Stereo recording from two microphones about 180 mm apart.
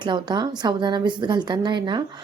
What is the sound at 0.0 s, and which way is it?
Speech, 25° right (ahead or behind).